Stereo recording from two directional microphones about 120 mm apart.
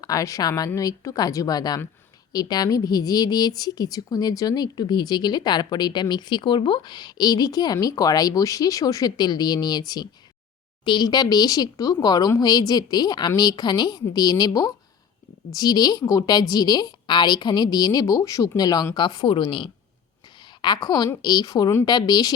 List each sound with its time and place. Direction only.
0.0 s a woman's voice: 30° left (ahead or behind)